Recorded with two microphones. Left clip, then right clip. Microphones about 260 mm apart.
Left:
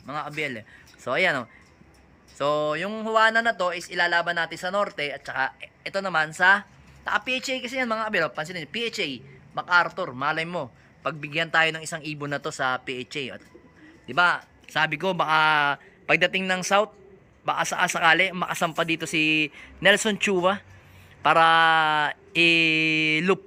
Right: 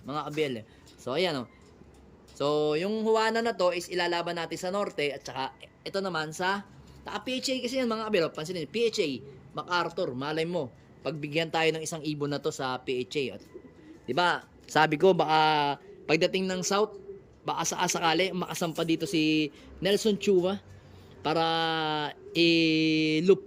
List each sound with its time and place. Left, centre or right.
0.1 s a man's voice: centre
2.4 s a man's voice: centre
12.2 s speech: centre
12.8 s a man's voice: centre